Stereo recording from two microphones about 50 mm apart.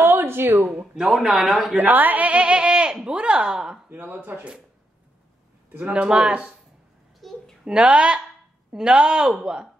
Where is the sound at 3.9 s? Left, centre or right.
Right.